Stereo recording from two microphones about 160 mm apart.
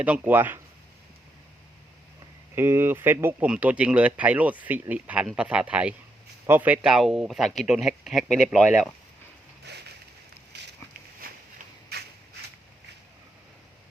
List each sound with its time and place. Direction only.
0.0 s speech: 10° right (ahead or behind)
2.6 s speech: 15° right (ahead or behind)
9.7 s a sound: 90° right